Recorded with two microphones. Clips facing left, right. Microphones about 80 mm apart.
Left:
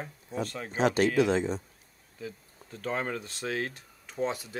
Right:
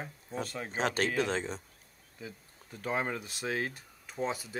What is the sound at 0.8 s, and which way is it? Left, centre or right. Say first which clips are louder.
Speech: left 6 dB; right.